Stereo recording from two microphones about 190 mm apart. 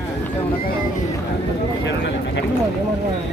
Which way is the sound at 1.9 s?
65° left (ahead or behind).